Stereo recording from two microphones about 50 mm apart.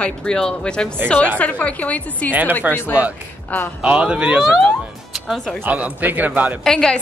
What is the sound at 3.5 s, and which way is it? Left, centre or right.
Speech, left.